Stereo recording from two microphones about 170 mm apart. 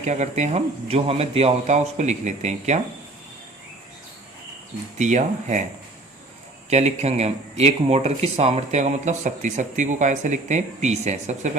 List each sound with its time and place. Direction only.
0.0 s speech: 45° right (ahead or behind)
4.9 s speech: 45° right (ahead or behind)
6.7 s speech: 40° right (ahead or behind)